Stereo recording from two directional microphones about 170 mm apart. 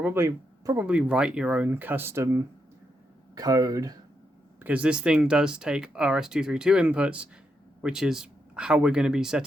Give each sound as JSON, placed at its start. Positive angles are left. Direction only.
{"t": 0.0, "sound": "speech", "side_deg": -15}
{"t": 0.9, "sound": "speech", "side_deg": -5}
{"t": 4.6, "sound": "speech", "side_deg": -10}